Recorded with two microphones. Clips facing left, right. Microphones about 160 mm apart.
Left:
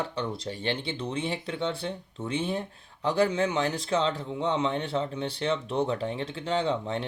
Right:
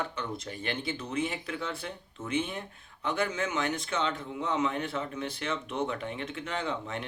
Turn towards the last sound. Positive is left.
turn(degrees=30)  # may be behind; listen again after turning